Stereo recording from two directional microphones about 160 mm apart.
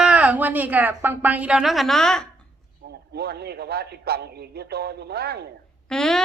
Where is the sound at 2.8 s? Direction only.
90° right.